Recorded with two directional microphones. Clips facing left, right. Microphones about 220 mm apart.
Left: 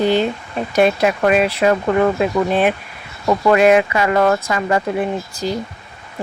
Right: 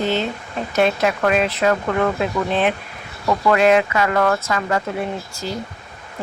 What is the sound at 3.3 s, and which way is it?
Speech, 15° left (ahead or behind).